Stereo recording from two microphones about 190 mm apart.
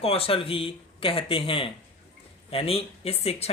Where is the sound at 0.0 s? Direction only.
30° left (ahead or behind).